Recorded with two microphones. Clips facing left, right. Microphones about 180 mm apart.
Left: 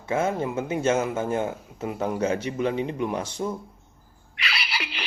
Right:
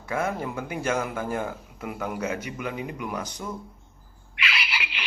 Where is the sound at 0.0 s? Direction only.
25° left (ahead or behind).